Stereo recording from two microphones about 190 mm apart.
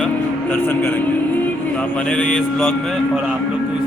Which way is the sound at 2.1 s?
5° left (ahead or behind).